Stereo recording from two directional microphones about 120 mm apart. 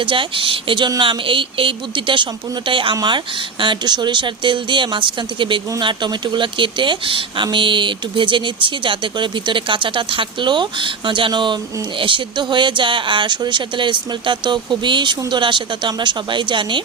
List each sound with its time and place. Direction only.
0.0 s speech: 45° right (ahead or behind)